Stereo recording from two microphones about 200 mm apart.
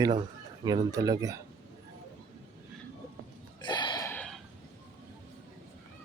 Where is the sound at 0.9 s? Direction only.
20° right (ahead or behind).